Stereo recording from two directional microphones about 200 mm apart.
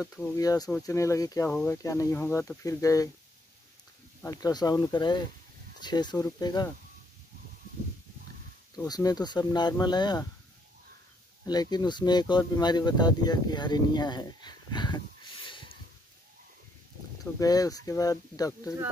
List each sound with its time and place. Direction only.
0.1 s speech: 15° left (ahead or behind)
1.5 s speech: 5° left (ahead or behind)
1.8 s speech: 15° left (ahead or behind)
4.2 s speech: 15° left (ahead or behind)
8.7 s speech: 20° left (ahead or behind)
11.4 s speech: 20° left (ahead or behind)
17.2 s speech: 15° left (ahead or behind)